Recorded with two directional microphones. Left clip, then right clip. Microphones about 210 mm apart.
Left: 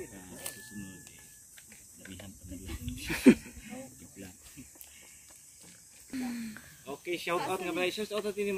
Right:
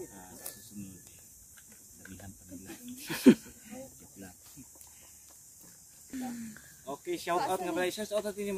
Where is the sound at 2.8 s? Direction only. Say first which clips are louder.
Even; 10° right (ahead or behind).